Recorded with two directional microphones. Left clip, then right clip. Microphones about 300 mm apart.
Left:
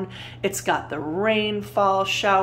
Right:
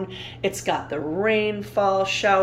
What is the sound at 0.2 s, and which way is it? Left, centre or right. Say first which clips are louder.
Speech: even; centre.